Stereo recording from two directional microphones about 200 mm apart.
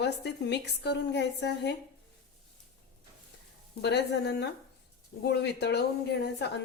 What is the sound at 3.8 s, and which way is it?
A woman's voice, 55° left (ahead or behind).